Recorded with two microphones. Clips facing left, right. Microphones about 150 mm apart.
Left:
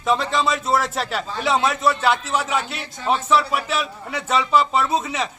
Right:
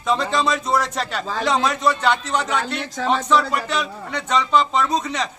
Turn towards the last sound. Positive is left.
turn(degrees=5)  # may be behind; listen again after turning